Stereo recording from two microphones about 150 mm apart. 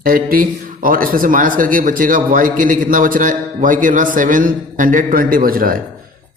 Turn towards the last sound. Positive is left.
turn(degrees=-70)  # may be behind; listen again after turning